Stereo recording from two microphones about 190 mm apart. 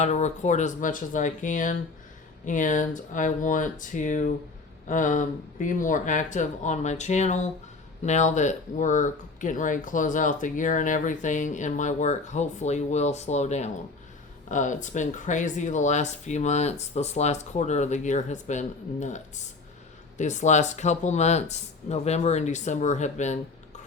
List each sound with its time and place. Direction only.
0.0 s speech: 35° left (ahead or behind)